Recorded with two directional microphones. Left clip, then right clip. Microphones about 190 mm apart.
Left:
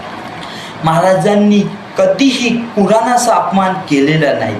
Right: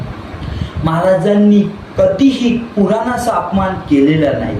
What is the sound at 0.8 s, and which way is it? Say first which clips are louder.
A man's voice: left 2 dB; 15° right (ahead or behind).